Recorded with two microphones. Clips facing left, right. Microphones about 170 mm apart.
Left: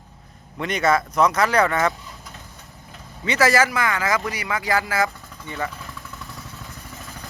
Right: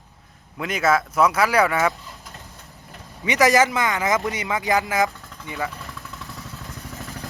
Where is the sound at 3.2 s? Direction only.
15° right (ahead or behind).